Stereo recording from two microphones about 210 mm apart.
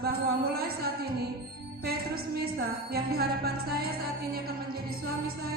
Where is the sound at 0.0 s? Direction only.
45° right (ahead or behind).